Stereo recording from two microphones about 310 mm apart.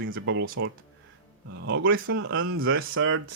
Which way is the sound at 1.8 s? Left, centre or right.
Right.